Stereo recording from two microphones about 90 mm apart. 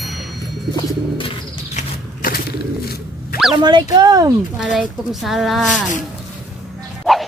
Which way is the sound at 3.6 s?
55° right (ahead or behind).